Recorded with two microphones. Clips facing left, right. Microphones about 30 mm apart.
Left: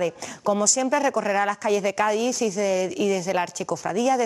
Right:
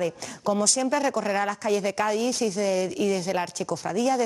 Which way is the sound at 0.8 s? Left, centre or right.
Centre.